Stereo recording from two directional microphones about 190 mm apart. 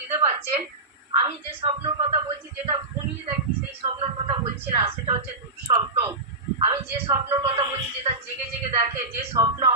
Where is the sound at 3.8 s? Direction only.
25° right (ahead or behind).